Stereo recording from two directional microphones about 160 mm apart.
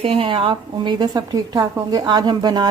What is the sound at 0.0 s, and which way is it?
A woman's voice, 35° right (ahead or behind).